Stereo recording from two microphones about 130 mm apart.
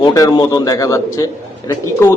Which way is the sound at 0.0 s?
30° left (ahead or behind).